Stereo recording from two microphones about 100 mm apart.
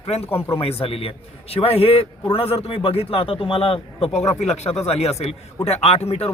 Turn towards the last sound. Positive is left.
turn(degrees=85)